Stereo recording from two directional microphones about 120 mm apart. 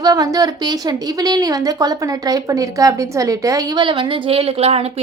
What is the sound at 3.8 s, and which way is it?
A woman's voice, 40° right (ahead or behind).